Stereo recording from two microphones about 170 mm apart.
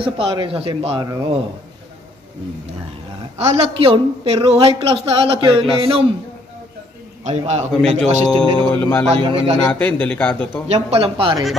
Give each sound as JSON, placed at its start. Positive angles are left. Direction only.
{"t": 0.0, "sound": "a woman's voice", "side_deg": -30}
{"t": 1.0, "sound": "a man's voice", "side_deg": -20}
{"t": 3.3, "sound": "a woman's voice", "side_deg": -40}
{"t": 7.2, "sound": "a woman's voice", "side_deg": -40}
{"t": 8.4, "sound": "a man's voice", "side_deg": 10}
{"t": 9.2, "sound": "a woman's voice", "side_deg": -35}
{"t": 9.7, "sound": "a man's voice", "side_deg": 10}
{"t": 10.7, "sound": "a woman's voice", "side_deg": -35}